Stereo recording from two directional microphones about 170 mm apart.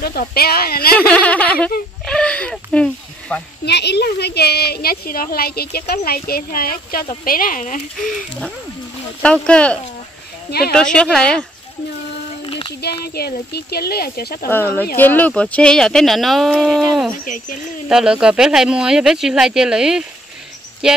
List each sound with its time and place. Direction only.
0.0 s a woman's voice: 65° left (ahead or behind)
0.9 s speech: 10° left (ahead or behind)
3.6 s a woman's voice: 75° left (ahead or behind); by 7.8 s 50° left (ahead or behind)
9.2 s speech: 5° left (ahead or behind)
12.4 s a sound: 30° left (ahead or behind)
13.0 s a woman's voice: 65° left (ahead or behind)
15.0 s speech: 10° left (ahead or behind)
17.2 s speech: 50° left (ahead or behind)
17.8 s speech: 5° right (ahead or behind)